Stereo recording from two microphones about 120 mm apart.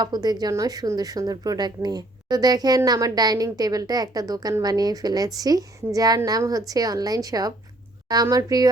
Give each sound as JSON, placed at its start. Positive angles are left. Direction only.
{"t": 0.0, "sound": "a woman's voice", "side_deg": -35}